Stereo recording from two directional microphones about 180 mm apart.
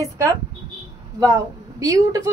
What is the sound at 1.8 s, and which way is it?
Speech, 20° right (ahead or behind).